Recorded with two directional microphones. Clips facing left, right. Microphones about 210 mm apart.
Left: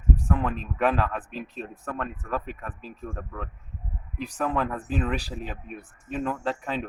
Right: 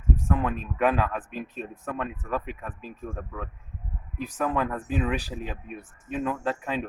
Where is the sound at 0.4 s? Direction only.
10° right (ahead or behind).